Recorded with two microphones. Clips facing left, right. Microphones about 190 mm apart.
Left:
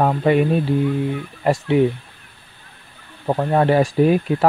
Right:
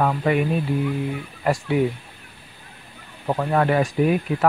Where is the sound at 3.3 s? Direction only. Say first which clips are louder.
Left 3 dB; 25° left (ahead or behind).